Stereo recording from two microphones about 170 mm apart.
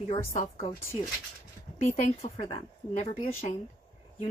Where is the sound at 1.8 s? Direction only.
50° left (ahead or behind).